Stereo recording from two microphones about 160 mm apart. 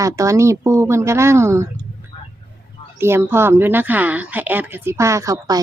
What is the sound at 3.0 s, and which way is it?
Speech, 15° right (ahead or behind).